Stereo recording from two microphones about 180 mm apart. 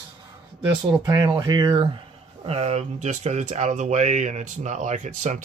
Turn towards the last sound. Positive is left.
turn(degrees=-45)  # may be behind; listen again after turning